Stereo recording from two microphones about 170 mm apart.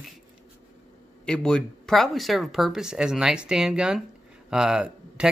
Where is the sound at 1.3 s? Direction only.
5° left (ahead or behind).